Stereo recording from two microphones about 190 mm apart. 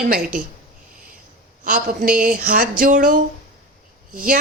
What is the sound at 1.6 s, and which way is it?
A woman's voice, 45° right (ahead or behind).